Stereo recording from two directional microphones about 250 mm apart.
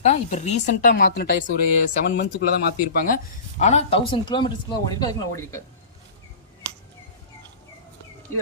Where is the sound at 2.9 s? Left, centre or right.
Left; by 5.6 s centre.